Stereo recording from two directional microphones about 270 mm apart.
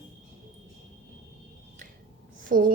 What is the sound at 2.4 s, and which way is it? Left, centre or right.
Speech, right.